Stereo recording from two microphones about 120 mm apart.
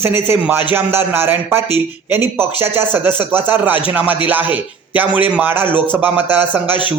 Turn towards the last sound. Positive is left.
turn(degrees=-15)  # may be behind; listen again after turning